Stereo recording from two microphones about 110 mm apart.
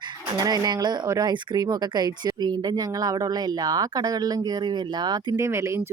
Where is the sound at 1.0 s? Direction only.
30° right (ahead or behind).